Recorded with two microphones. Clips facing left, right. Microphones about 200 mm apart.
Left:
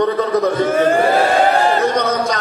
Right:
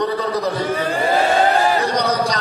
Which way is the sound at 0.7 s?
45° left (ahead or behind).